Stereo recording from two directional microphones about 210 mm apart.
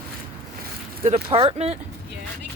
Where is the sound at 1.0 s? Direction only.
25° right (ahead or behind).